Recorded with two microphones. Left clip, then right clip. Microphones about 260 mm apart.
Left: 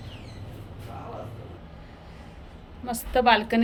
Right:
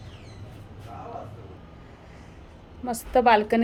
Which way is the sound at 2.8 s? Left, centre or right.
Centre.